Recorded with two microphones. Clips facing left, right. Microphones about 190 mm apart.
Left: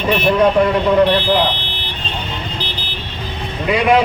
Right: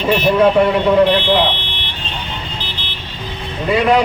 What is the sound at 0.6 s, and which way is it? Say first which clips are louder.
Speech: right 1 dB; 5° right (ahead or behind).